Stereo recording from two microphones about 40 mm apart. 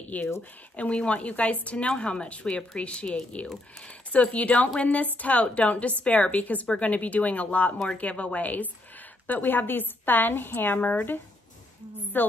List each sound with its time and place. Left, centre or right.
0.1 s speech: left
6.4 s speech: left
9.3 s a woman's voice: left
12.1 s a woman's voice: left